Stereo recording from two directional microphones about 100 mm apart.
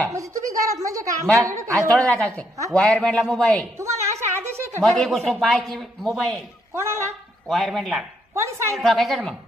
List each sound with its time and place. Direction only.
0.2 s a woman's voice: 35° right (ahead or behind)
1.9 s a man's voice: 5° left (ahead or behind)
3.8 s a sound: 30° right (ahead or behind)
4.8 s a man's voice: centre (ahead or behind)
6.7 s a woman's voice: 25° right (ahead or behind)
7.4 s a man's voice: centre (ahead or behind)
8.4 s a woman's voice: 30° right (ahead or behind)
8.8 s a man's voice: centre (ahead or behind)